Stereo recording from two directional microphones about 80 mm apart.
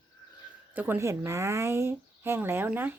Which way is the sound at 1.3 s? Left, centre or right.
Right.